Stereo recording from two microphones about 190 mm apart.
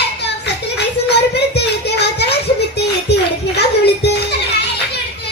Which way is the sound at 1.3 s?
60° left (ahead or behind).